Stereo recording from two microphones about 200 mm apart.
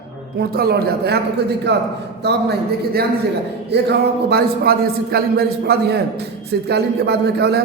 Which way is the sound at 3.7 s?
55° right (ahead or behind).